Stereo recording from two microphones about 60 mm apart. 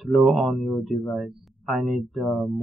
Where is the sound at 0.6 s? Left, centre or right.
Centre.